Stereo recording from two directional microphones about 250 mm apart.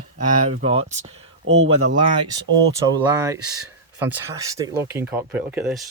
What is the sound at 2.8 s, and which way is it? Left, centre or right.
Speech, centre.